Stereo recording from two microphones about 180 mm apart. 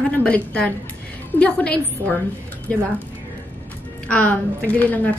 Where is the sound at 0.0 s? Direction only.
5° left (ahead or behind).